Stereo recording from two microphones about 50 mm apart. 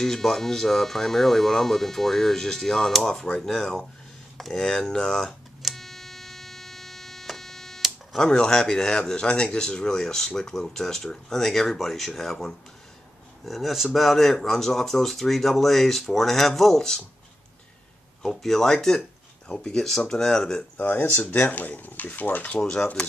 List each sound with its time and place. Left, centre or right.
0.0 s speech: centre
5.6 s hum: centre
8.2 s speech: centre
18.2 s speech: centre
20.7 s speech: left
22.6 s speech: centre